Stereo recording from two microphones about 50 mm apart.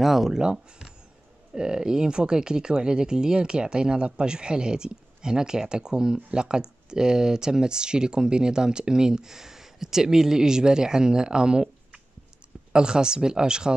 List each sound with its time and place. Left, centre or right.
0.0 s speech: centre